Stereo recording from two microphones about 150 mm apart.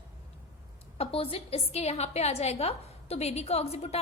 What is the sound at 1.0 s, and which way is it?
A woman's voice, 40° left (ahead or behind).